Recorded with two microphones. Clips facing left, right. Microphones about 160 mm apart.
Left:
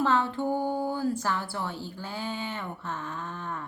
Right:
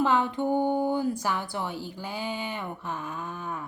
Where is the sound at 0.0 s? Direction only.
15° right (ahead or behind).